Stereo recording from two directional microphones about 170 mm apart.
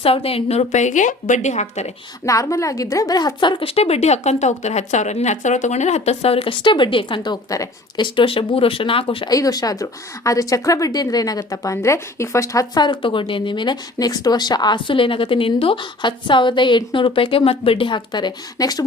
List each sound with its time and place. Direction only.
0.0 s a woman's voice: 35° left (ahead or behind)
2.2 s a woman's voice: 20° left (ahead or behind)